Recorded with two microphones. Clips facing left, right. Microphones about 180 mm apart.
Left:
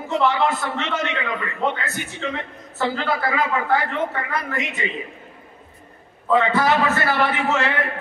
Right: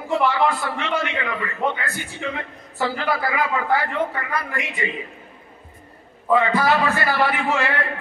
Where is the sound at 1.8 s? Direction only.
20° left (ahead or behind).